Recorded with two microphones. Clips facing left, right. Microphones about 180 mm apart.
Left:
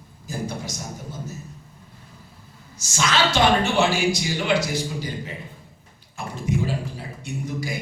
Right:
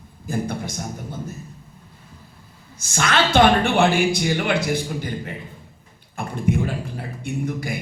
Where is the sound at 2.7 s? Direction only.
55° right (ahead or behind).